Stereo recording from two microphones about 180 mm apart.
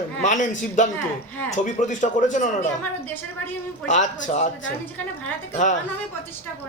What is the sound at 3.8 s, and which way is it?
Speech, 45° left (ahead or behind).